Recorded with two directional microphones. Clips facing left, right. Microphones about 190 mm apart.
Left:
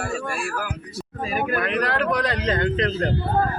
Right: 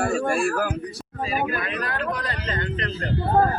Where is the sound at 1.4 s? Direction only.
60° left (ahead or behind); by 2.9 s 90° left.